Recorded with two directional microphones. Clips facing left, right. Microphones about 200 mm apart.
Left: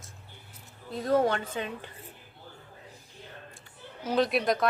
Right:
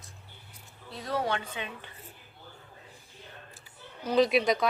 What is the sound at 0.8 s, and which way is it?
Speech, 45° left (ahead or behind).